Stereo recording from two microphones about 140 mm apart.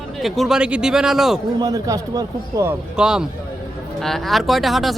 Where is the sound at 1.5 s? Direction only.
25° right (ahead or behind).